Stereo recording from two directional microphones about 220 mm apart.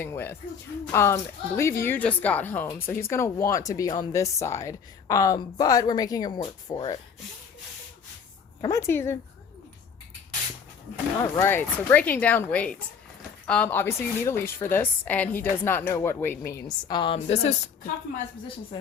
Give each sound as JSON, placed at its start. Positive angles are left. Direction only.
{"t": 0.0, "sound": "speech", "side_deg": 10}
{"t": 8.6, "sound": "speech", "side_deg": 10}
{"t": 11.2, "sound": "a woman's voice", "side_deg": 10}